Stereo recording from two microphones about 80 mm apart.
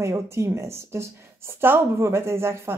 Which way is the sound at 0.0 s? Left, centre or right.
Right.